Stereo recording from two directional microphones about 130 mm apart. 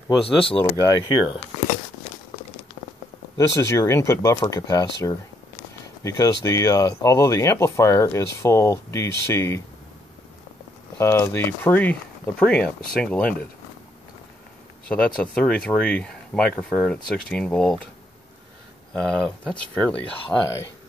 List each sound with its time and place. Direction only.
0.2 s speech: 45° left (ahead or behind)
0.8 s speech: 35° left (ahead or behind)
3.3 s speech: 20° left (ahead or behind)
11.0 s speech: 20° left (ahead or behind)
14.9 s speech: 10° left (ahead or behind)
19.0 s speech: 5° left (ahead or behind)